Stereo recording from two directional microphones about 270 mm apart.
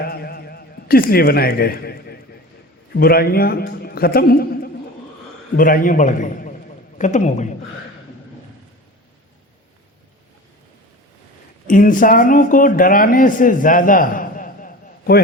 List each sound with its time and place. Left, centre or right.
0.0 s a sound: left
2.9 s a man's voice: left
11.7 s speech: left